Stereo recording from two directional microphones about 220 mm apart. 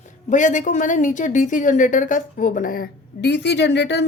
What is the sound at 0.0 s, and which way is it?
A woman's voice, 35° left (ahead or behind).